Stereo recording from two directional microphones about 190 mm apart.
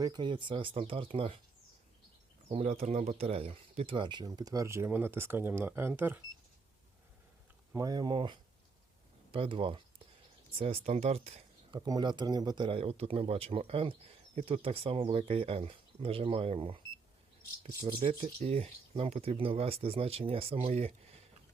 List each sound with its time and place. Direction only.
0.0 s speech: 25° right (ahead or behind)
2.5 s speech: 30° right (ahead or behind); by 6.1 s 10° right (ahead or behind)
7.7 s speech: 20° right (ahead or behind); by 11.8 s 35° right (ahead or behind)
11.9 s speech: 20° right (ahead or behind)
18.0 s speech: 35° right (ahead or behind)